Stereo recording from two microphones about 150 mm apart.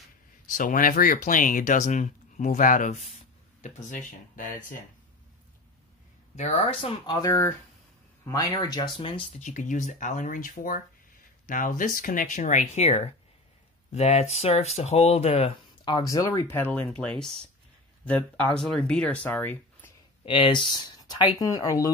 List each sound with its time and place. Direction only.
0.5 s speech: 65° left (ahead or behind)
6.3 s speech: 45° left (ahead or behind)
7.2 s speech: 15° left (ahead or behind); by 9.2 s 35° left (ahead or behind)
9.4 s speech: 55° left (ahead or behind); by 19.9 s 10° left (ahead or behind)
20.2 s speech: 35° left (ahead or behind)